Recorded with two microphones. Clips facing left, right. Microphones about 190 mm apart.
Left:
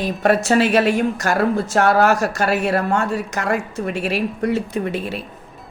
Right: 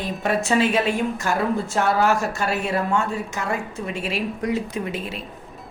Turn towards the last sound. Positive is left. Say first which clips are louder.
# left 5 dB
turn(degrees=65)  # may be behind; listen again after turning